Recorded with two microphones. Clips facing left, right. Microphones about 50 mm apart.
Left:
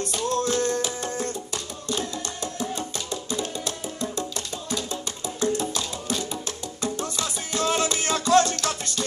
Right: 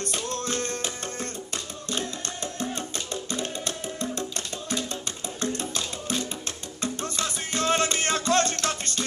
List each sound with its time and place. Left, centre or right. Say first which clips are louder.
0.1 s music: left 8 dB; right
5.4 s music: left 5 dB; right